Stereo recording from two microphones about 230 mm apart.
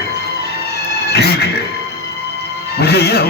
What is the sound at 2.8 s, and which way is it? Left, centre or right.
Speech, left.